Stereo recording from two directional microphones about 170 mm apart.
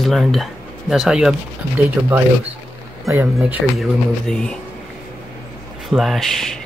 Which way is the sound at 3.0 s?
15° right (ahead or behind).